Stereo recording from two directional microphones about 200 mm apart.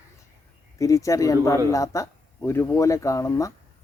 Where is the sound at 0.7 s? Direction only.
15° left (ahead or behind).